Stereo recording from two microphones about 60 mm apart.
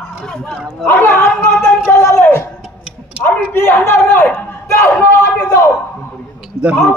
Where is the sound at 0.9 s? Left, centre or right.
Left.